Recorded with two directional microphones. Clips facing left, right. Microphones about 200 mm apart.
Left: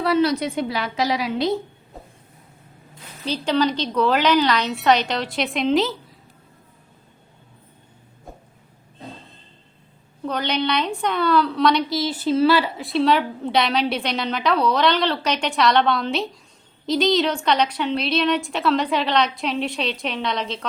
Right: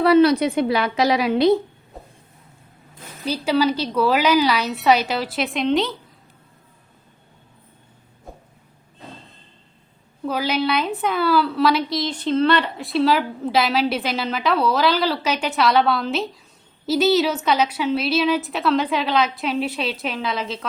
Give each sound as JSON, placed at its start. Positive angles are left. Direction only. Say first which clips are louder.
{"t": 0.0, "sound": "a woman's voice", "louder": "right 5 dB", "side_deg": -60}
{"t": 3.2, "sound": "a woman's voice", "louder": "right 1 dB", "side_deg": -10}
{"t": 10.2, "sound": "a woman's voice", "louder": "right 1 dB", "side_deg": -5}